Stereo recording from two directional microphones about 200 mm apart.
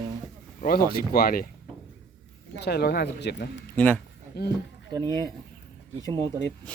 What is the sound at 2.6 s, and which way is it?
Speech, 55° left (ahead or behind).